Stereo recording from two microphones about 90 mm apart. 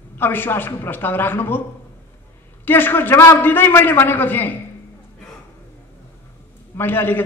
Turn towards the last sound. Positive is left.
turn(degrees=25)  # may be behind; listen again after turning